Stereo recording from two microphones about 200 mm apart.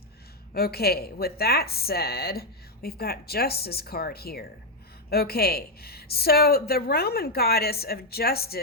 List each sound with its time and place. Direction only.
0.5 s a woman's voice: 50° left (ahead or behind)